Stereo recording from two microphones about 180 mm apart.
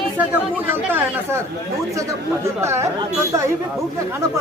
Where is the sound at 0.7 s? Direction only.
10° right (ahead or behind).